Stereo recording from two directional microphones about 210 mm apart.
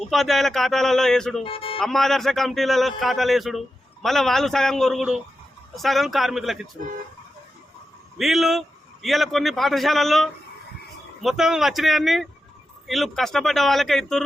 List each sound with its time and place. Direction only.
0.1 s a man's voice: centre (ahead or behind)
1.5 s music: 25° left (ahead or behind)
1.8 s a man's voice: centre (ahead or behind)
8.2 s a man's voice: centre (ahead or behind)